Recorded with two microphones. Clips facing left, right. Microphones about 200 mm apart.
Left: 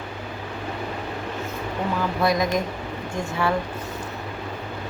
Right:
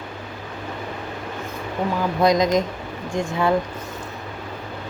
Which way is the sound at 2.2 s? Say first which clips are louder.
Right 5 dB; 20° right (ahead or behind).